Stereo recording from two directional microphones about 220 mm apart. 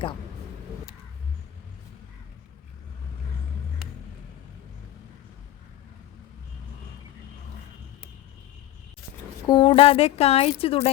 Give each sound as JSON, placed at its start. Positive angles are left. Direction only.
{"t": 9.5, "sound": "speech", "side_deg": 25}